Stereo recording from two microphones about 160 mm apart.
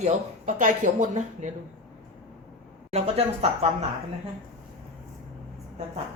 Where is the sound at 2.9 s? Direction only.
40° right (ahead or behind).